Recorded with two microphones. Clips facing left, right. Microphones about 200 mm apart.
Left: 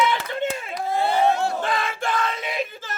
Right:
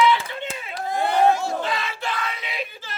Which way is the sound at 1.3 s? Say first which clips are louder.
Left 2 dB; 55° left (ahead or behind).